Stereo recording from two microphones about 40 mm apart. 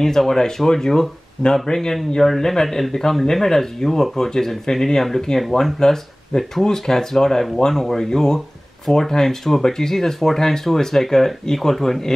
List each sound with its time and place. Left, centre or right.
0.0 s speech: centre